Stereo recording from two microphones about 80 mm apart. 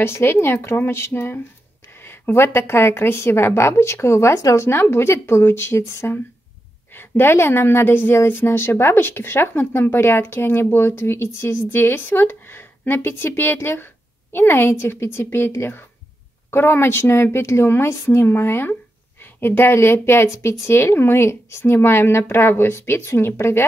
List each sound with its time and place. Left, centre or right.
0.0 s a woman's voice: left